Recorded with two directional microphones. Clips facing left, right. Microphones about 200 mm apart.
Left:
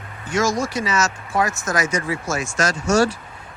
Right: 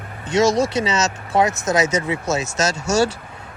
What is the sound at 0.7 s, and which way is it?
Speech, 20° right (ahead or behind).